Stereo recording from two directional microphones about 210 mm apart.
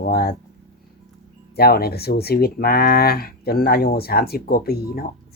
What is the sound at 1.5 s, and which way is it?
Speech, 50° left (ahead or behind).